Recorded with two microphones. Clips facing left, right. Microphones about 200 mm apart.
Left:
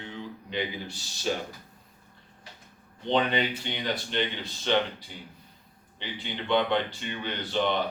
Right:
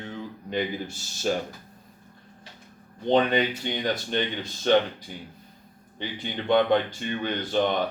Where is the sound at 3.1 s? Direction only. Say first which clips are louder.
Right 4 dB; 45° right (ahead or behind).